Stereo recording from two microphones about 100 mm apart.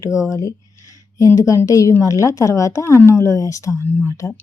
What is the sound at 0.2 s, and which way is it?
A woman's voice, 30° left (ahead or behind).